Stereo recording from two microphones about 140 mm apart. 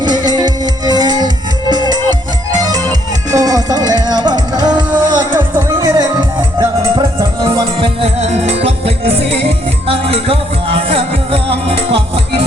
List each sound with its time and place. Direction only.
0.3 s music: 30° right (ahead or behind)
7.8 s music: 45° right (ahead or behind)